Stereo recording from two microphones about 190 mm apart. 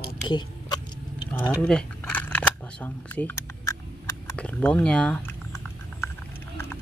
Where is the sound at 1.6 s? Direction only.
5° left (ahead or behind).